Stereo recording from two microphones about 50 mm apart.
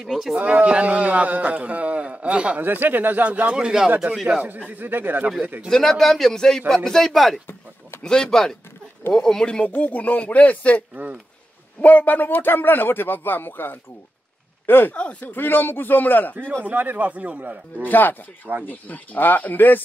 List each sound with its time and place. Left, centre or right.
0.0 s speech: centre
0.4 s speech: right
2.6 s a man's voice: right
3.5 s speech: centre
4.6 s a man's voice: right
5.7 s a man's voice: centre
8.0 s a man's voice: centre
9.7 s a man's voice: left
11.8 s a man's voice: left
15.0 s speech: left
15.2 s a man's voice: left
16.6 s a man's voice: right
17.8 s a man's voice: left